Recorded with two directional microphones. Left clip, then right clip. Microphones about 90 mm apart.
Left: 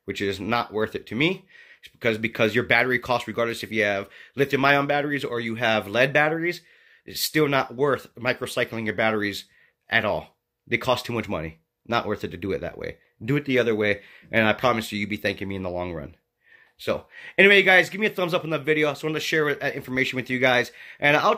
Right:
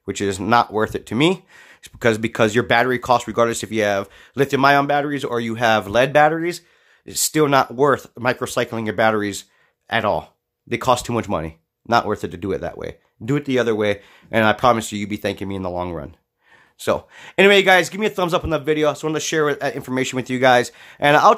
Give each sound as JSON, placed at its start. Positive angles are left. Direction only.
{"t": 0.1, "sound": "speech", "side_deg": -60}
{"t": 2.3, "sound": "speech", "side_deg": -55}
{"t": 5.3, "sound": "speech", "side_deg": -55}
{"t": 16.8, "sound": "speech", "side_deg": -60}
{"t": 18.6, "sound": "speech", "side_deg": -30}